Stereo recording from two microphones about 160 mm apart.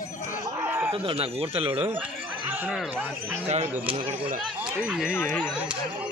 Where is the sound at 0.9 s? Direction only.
35° right (ahead or behind).